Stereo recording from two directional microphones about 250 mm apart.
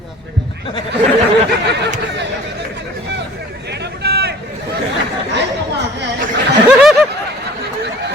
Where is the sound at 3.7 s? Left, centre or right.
Right.